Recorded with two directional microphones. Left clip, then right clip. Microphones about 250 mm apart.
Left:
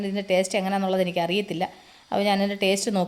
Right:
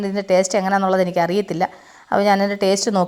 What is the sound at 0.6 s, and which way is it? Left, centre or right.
Speech, centre.